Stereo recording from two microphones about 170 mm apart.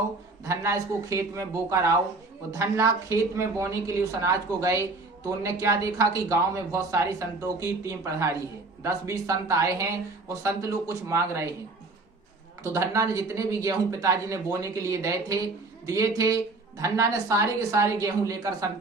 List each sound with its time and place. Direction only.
0.4 s a woman's voice: 20° right (ahead or behind)
12.6 s a woman's voice: 15° right (ahead or behind)